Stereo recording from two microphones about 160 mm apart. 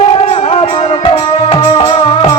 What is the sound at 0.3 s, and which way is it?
Music, 35° left (ahead or behind).